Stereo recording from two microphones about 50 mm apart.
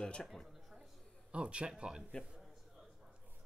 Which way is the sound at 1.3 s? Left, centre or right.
Right.